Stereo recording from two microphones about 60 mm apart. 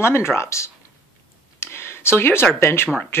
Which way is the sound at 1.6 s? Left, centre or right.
Left.